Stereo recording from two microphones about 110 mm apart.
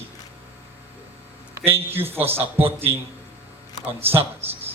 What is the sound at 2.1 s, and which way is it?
Speech, 20° right (ahead or behind).